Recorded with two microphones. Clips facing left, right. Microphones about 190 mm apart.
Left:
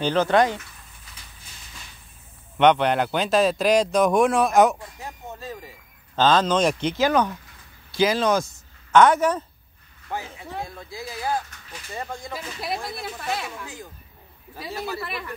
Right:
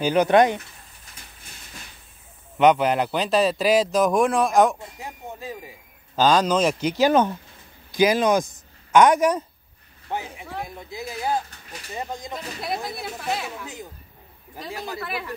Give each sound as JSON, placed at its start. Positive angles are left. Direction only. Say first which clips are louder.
{"t": 0.0, "sound": "speech", "louder": "right 2 dB", "side_deg": -15}
{"t": 2.6, "sound": "speech", "louder": "even", "side_deg": -5}
{"t": 4.7, "sound": "speech", "louder": "right 1 dB", "side_deg": -15}
{"t": 12.4, "sound": "speech", "louder": "right 1 dB", "side_deg": 0}
{"t": 14.7, "sound": "speech", "louder": "left 2 dB", "side_deg": -15}
{"t": 15.0, "sound": "speech", "louder": "right 2 dB", "side_deg": 0}